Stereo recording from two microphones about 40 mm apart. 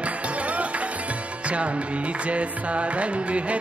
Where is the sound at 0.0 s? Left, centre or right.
Right.